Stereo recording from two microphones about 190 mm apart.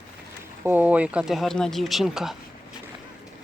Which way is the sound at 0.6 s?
10° right (ahead or behind).